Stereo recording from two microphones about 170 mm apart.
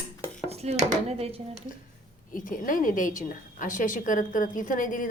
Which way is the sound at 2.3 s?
50° left (ahead or behind).